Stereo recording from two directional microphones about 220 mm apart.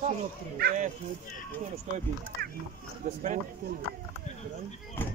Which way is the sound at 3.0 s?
35° right (ahead or behind).